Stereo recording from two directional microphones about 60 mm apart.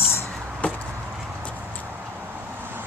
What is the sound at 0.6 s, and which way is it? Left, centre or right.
Chop, left.